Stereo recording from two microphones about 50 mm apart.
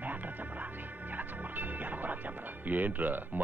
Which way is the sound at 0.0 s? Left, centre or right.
Right.